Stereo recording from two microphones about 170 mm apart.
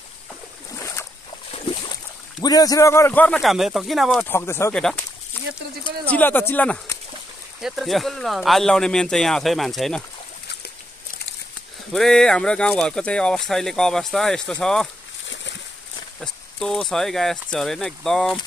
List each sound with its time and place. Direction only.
0.7 s boat: 15° left (ahead or behind)
2.4 s a man's voice: 20° left (ahead or behind); by 4.3 s centre (ahead or behind)
4.3 s a man's voice: 15° left (ahead or behind)
5.4 s a sound: 10° left (ahead or behind)
6.0 s a man's voice: 10° left (ahead or behind)
11.9 s speech: 5° left (ahead or behind)
16.2 s speech: 5° left (ahead or behind)